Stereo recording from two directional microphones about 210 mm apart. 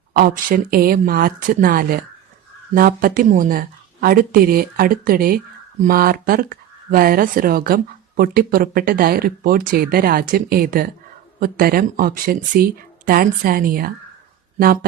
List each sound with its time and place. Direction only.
0.1 s speech: 45° right (ahead or behind)